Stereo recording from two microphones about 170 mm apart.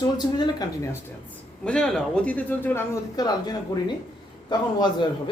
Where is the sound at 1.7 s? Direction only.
5° left (ahead or behind).